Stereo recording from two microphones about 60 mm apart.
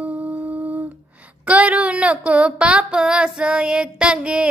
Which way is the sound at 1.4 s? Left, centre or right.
Right.